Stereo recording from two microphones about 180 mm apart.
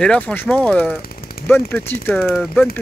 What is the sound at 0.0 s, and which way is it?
Speech, 5° left (ahead or behind).